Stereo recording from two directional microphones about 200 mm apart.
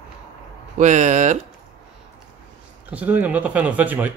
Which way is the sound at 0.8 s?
35° right (ahead or behind).